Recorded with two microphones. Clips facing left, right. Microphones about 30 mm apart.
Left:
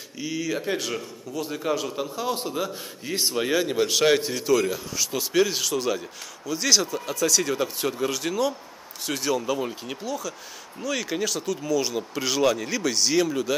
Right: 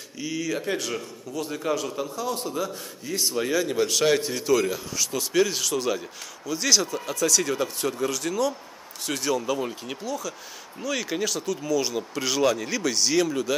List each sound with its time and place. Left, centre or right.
0.2 s speech: centre
2.0 s a man's voice: left
4.3 s speech: centre
9.0 s speech: centre